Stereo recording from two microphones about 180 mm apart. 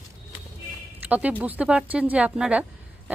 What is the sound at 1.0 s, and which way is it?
Speech, 10° right (ahead or behind).